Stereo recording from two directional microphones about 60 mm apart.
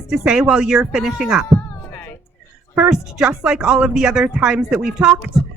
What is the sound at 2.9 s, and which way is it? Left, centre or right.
A woman's voice, centre.